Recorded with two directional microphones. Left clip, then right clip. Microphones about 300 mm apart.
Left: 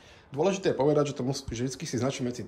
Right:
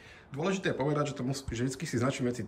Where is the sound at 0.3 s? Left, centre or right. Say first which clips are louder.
Left 6 dB; centre.